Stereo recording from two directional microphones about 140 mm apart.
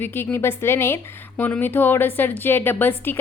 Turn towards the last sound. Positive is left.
turn(degrees=15)  # may be behind; listen again after turning